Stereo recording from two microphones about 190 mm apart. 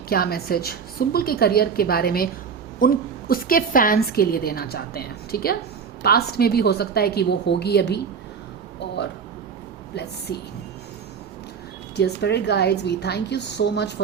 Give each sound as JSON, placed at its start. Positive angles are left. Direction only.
{"t": 0.1, "sound": "a woman's voice", "side_deg": 55}
{"t": 9.9, "sound": "a woman's voice", "side_deg": 60}
{"t": 11.9, "sound": "a woman's voice", "side_deg": 60}